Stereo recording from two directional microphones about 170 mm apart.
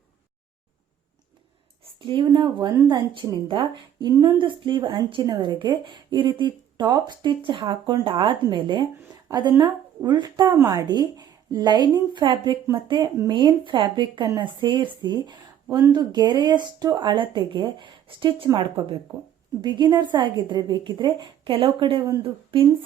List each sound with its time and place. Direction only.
1.8 s a woman's voice: 30° right (ahead or behind)